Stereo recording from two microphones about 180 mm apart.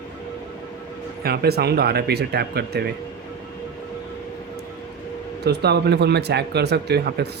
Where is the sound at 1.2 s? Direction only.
60° right (ahead or behind).